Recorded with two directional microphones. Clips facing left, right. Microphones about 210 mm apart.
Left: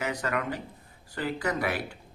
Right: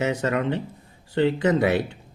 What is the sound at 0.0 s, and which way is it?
Speech, 25° right (ahead or behind).